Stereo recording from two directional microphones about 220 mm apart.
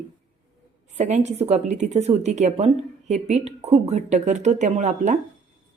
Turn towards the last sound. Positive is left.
turn(degrees=-30)  # may be behind; listen again after turning